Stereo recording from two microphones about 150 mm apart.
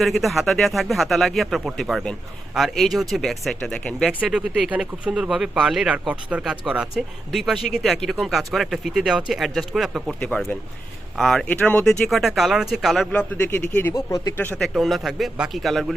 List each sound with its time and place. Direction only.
0.0 s speech: centre (ahead or behind)
14.6 s speech: centre (ahead or behind)